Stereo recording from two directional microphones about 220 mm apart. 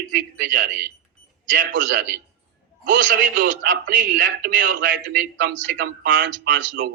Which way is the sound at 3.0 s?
55° right (ahead or behind).